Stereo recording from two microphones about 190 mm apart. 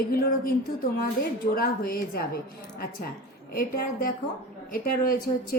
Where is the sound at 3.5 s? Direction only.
50° left (ahead or behind).